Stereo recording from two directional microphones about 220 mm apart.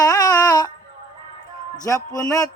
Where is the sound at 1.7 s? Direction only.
15° left (ahead or behind).